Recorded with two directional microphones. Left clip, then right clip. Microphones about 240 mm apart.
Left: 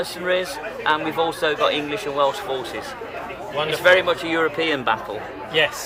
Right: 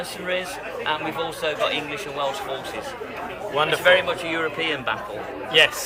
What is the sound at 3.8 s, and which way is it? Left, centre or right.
Speech, left.